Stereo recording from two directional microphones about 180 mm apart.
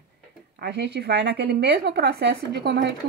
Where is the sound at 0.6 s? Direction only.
70° right (ahead or behind).